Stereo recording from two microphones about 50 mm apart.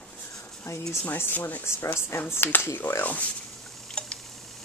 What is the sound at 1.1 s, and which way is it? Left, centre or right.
Speech, left.